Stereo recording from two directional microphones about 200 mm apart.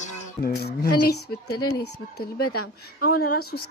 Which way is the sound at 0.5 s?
50° left (ahead or behind).